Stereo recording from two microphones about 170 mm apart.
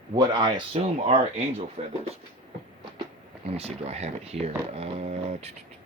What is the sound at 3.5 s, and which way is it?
Speech, 35° right (ahead or behind).